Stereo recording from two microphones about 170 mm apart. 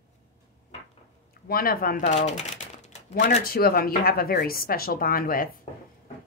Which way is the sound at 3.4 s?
60° left (ahead or behind).